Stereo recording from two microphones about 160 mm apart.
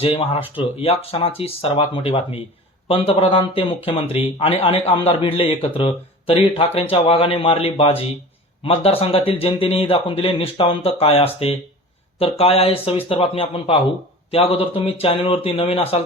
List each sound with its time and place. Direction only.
0.0 s a man's voice: 35° left (ahead or behind)